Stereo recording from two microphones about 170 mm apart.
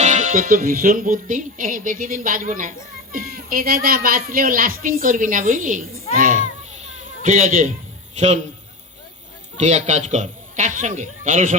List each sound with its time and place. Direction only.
0.0 s music: 50° right (ahead or behind)
6.1 s a child's voice: 55° right (ahead or behind)
6.8 s a sound: 45° right (ahead or behind)
8.1 s a man's voice: 45° right (ahead or behind)
9.6 s speech: 45° right (ahead or behind)